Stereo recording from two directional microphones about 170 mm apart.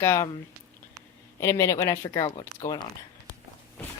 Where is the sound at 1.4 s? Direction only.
15° left (ahead or behind).